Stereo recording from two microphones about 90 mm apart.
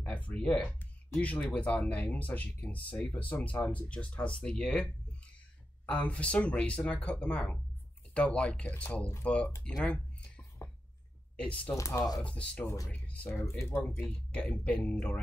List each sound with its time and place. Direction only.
0.0 s speech: 15° left (ahead or behind)
5.9 s speech: 15° left (ahead or behind)
11.7 s speech: 35° left (ahead or behind)
12.2 s speech: 15° left (ahead or behind)
13.3 s speech: 30° left (ahead or behind)
13.8 s speech: 15° left (ahead or behind)